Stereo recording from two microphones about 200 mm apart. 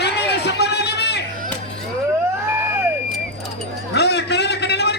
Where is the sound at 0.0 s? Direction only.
55° left (ahead or behind).